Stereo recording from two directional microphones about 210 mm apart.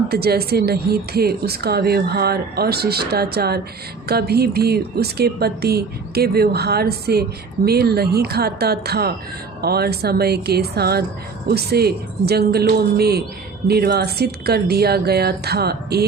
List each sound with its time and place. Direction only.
0.1 s speech: 50° right (ahead or behind)